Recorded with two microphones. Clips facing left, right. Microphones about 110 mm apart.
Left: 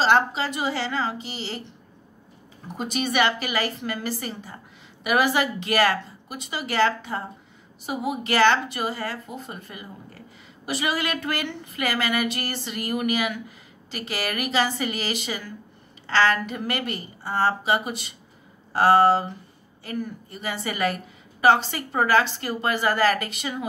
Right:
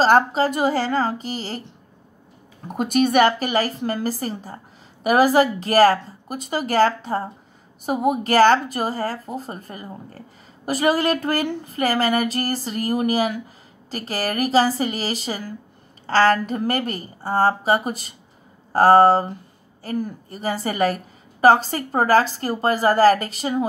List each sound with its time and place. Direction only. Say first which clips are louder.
0.0 s a woman's voice: right 5 dB; 45° right (ahead or behind)
2.7 s a woman's voice: right 8 dB; 50° right (ahead or behind); by 23.6 s 35° right (ahead or behind)